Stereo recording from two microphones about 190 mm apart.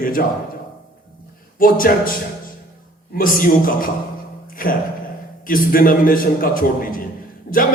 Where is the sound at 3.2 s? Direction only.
45° left (ahead or behind).